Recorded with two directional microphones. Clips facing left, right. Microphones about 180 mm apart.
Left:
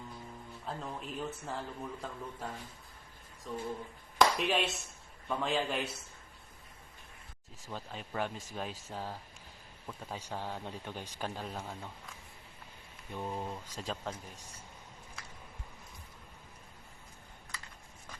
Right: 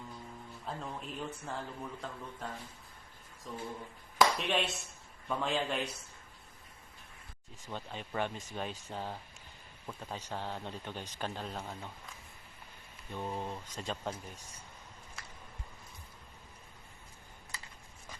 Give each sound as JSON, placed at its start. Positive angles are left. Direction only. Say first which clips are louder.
{"t": 0.6, "sound": "speech", "louder": "left 1 dB", "side_deg": 0}
{"t": 4.2, "sound": "a sound", "louder": "left 1 dB", "side_deg": 0}
{"t": 5.4, "sound": "speech", "louder": "left 1 dB", "side_deg": 0}
{"t": 7.6, "sound": "speech", "louder": "right 1 dB", "side_deg": 5}